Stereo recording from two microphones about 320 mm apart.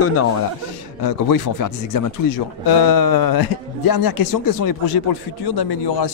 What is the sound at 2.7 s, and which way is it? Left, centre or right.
Speech, left.